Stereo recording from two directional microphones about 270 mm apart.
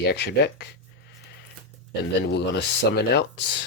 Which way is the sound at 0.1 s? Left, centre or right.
Left.